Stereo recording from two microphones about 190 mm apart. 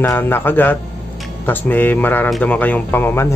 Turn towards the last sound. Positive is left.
turn(degrees=10)  # may be behind; listen again after turning